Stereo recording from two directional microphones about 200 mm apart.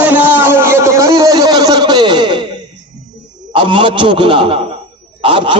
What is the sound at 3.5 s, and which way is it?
A man's voice, 25° right (ahead or behind).